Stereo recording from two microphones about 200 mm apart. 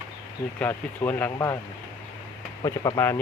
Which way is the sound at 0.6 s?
10° left (ahead or behind).